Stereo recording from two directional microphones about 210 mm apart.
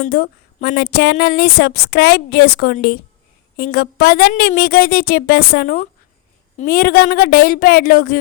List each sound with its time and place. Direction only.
0.0 s a woman's voice: 45° left (ahead or behind)